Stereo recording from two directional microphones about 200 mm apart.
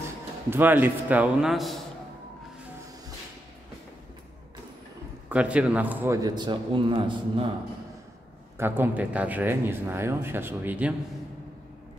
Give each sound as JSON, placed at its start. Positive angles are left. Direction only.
{"t": 0.5, "sound": "speech", "side_deg": -10}
{"t": 5.3, "sound": "a man's voice", "side_deg": -5}
{"t": 8.5, "sound": "speech", "side_deg": -10}